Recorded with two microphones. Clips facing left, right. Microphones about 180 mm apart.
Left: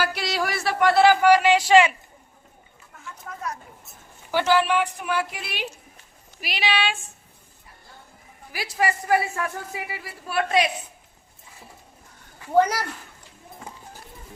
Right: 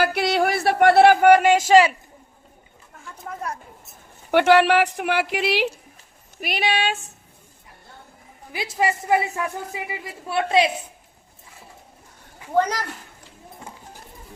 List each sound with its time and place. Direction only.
0.0 s speech: 55° right (ahead or behind); by 2.0 s 40° right (ahead or behind)
4.3 s speech: 60° right (ahead or behind)
6.4 s speech: 50° right (ahead or behind)
8.5 s a man's voice: 25° right (ahead or behind)
12.5 s speech: 10° left (ahead or behind)